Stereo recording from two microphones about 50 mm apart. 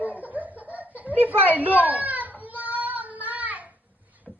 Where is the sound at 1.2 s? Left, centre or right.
Right.